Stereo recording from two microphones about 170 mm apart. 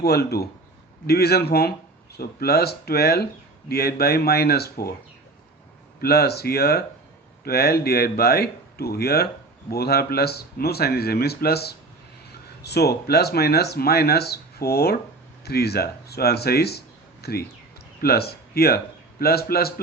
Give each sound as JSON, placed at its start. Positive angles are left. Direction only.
{"t": 0.0, "sound": "speech", "side_deg": 70}
{"t": 6.0, "sound": "speech", "side_deg": 65}